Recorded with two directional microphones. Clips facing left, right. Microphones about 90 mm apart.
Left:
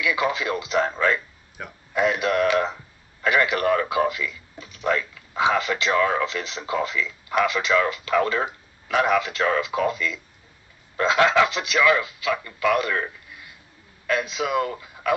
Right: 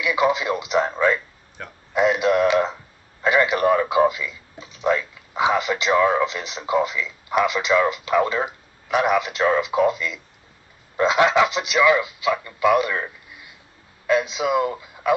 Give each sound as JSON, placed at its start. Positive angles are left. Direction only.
{"t": 0.0, "sound": "a man's voice", "side_deg": -20}
{"t": 1.6, "sound": "a man's voice", "side_deg": 10}
{"t": 2.0, "sound": "a man's voice", "side_deg": -20}